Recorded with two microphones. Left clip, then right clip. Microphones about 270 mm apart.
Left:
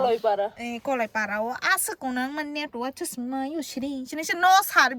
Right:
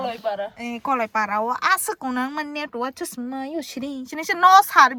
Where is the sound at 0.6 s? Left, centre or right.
Centre.